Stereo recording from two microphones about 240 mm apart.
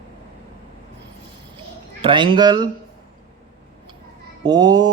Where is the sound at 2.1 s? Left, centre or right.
Centre.